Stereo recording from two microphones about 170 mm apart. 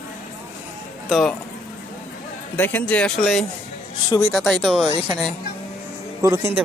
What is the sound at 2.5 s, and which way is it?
Speech, 10° left (ahead or behind).